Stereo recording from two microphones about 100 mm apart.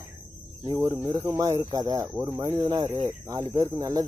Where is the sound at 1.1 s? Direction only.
40° right (ahead or behind).